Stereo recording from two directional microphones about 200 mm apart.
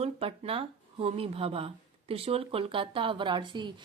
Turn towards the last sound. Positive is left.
turn(degrees=-25)  # may be behind; listen again after turning